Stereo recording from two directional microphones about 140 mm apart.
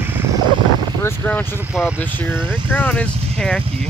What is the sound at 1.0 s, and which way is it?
Speech, 20° left (ahead or behind).